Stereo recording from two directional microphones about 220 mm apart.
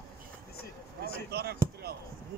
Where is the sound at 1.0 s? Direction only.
45° right (ahead or behind).